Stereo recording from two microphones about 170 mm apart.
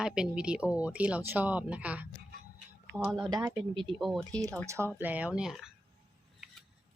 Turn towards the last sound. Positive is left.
turn(degrees=-5)  # may be behind; listen again after turning